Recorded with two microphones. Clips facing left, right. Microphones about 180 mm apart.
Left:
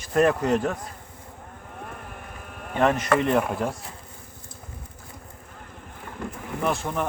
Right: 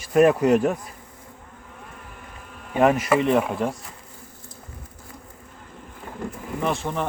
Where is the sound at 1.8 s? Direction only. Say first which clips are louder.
Left 6 dB; 60° left (ahead or behind).